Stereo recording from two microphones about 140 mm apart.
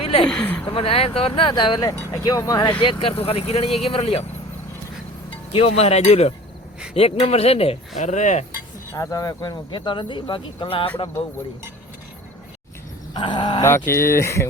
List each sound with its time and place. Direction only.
0.0 s a sound: 40° left (ahead or behind)
0.3 s speech: 10° left (ahead or behind)
0.7 s speech: 40° left (ahead or behind); by 2.6 s 25° left (ahead or behind)
2.8 s speech: 40° left (ahead or behind)
5.5 s speech: 45° left (ahead or behind)
8.9 s speech: 20° left (ahead or behind); by 11.1 s 40° left (ahead or behind)
13.1 s speech: 35° left (ahead or behind)
13.7 s speech: 15° left (ahead or behind)